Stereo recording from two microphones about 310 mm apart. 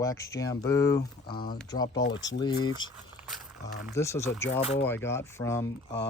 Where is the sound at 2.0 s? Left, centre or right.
Left.